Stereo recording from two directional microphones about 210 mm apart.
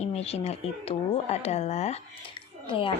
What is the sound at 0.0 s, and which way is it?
A woman's voice, 30° left (ahead or behind).